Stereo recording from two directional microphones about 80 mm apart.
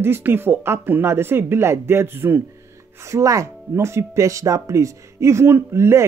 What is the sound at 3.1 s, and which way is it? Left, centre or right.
Speech, right.